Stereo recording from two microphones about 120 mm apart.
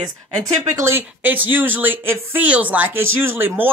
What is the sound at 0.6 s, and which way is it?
Speech, 25° right (ahead or behind).